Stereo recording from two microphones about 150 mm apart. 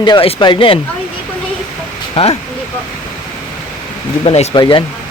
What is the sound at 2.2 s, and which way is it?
Speech, 40° left (ahead or behind).